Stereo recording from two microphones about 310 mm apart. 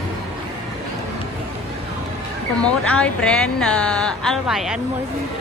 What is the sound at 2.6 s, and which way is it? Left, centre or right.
Speech, centre.